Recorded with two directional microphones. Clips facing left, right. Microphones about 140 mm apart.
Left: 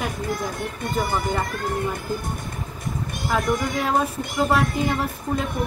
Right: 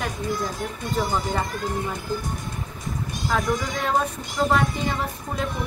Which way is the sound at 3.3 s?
5° left (ahead or behind).